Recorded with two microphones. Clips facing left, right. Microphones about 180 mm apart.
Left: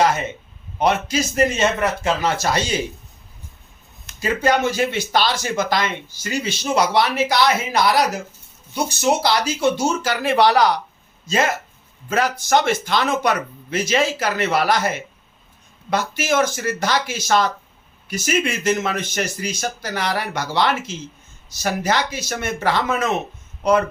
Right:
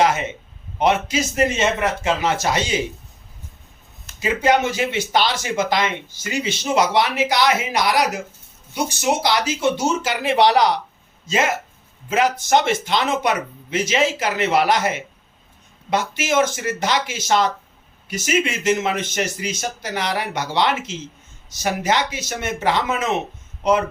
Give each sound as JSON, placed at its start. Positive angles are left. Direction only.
{"t": 0.0, "sound": "speech", "side_deg": -20}
{"t": 4.2, "sound": "speech", "side_deg": -20}